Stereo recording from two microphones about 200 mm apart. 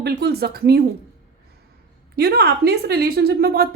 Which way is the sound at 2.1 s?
50° right (ahead or behind).